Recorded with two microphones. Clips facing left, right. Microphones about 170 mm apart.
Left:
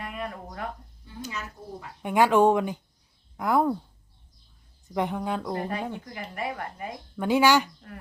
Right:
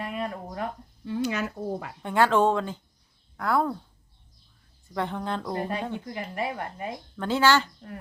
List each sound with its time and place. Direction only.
0.0 s a sound: 30° right (ahead or behind)
1.0 s speech: 75° right (ahead or behind)
2.0 s speech: 15° left (ahead or behind)
4.9 s speech: 10° left (ahead or behind)
5.5 s speech: 25° right (ahead or behind)
7.2 s speech: 15° left (ahead or behind)